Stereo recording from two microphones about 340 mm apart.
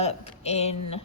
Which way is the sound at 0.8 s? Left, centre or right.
Left.